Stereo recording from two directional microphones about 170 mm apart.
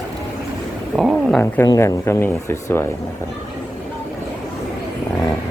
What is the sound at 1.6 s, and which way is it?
Speech, 20° left (ahead or behind).